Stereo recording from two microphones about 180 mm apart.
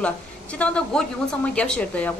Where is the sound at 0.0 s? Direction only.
5° left (ahead or behind).